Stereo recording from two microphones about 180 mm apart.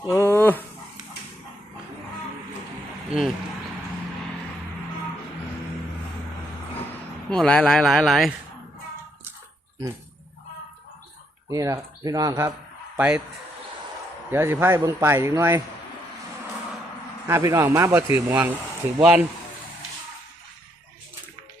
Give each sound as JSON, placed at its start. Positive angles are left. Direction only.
{"t": 0.1, "sound": "a sound", "side_deg": 15}
{"t": 3.1, "sound": "speech", "side_deg": 0}
{"t": 7.3, "sound": "speech", "side_deg": 5}
{"t": 11.5, "sound": "a man's voice", "side_deg": -20}
{"t": 14.3, "sound": "a man's voice", "side_deg": -10}
{"t": 17.2, "sound": "a man's voice", "side_deg": -15}